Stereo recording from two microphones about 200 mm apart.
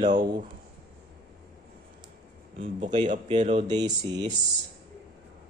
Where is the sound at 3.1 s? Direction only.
35° right (ahead or behind).